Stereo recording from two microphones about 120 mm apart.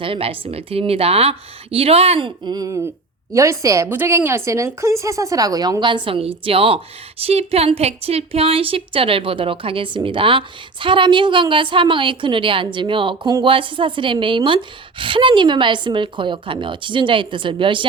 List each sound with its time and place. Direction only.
0.0 s a woman's voice: 50° right (ahead or behind)
2.5 s speech: 30° right (ahead or behind)